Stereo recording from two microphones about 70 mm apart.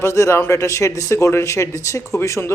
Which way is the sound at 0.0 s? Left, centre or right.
Left.